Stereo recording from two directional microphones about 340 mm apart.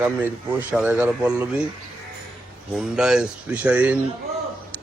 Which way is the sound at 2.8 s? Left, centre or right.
Centre.